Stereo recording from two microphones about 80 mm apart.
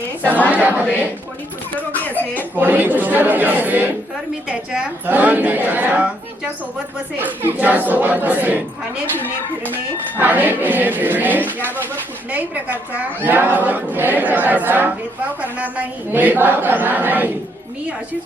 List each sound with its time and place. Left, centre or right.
0.5 s a woman's voice: centre
2.0 s a sound: left
2.6 s a woman's voice: right
10.2 s a woman's voice: right